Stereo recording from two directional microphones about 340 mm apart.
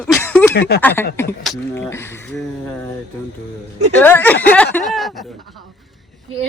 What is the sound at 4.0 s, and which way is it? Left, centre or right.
Speech, centre.